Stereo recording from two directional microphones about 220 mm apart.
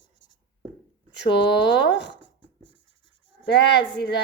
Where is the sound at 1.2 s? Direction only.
50° left (ahead or behind).